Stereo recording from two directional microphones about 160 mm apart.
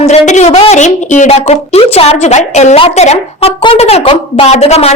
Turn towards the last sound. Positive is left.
turn(degrees=40)  # may be behind; listen again after turning